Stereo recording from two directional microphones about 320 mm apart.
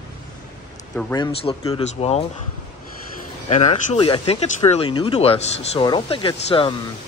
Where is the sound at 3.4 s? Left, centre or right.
Left.